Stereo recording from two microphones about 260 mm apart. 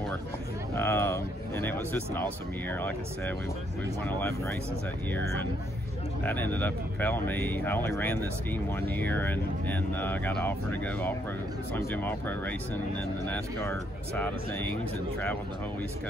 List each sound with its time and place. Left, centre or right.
0.7 s a sound: centre
4.0 s speech: centre
6.2 s speech: centre